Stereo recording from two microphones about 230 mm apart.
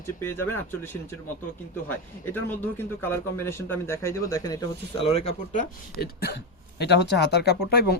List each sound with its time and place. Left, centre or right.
0.2 s speech: centre
2.3 s speech: centre; by 5.6 s left
6.0 s speech: left